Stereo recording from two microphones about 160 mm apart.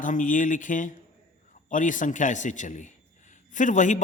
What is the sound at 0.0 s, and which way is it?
A man's voice, 55° left (ahead or behind).